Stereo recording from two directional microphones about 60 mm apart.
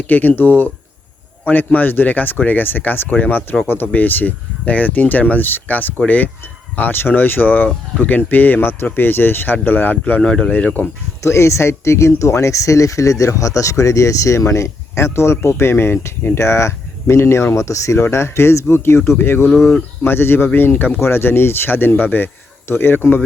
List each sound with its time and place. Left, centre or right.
0.1 s speech: left
10.8 s speech: left
11.2 s speech: left